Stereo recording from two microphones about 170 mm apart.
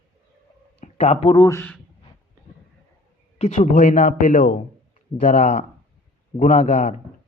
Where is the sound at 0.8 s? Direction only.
45° left (ahead or behind).